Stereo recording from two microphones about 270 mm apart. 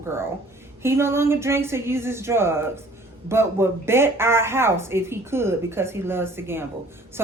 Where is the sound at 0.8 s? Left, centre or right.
Centre.